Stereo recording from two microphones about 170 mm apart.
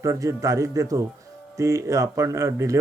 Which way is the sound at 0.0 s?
20° right (ahead or behind).